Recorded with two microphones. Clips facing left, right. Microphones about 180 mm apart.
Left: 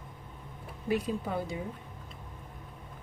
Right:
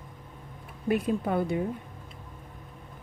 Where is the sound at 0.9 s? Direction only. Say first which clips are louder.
Right 4 dB; 55° right (ahead or behind).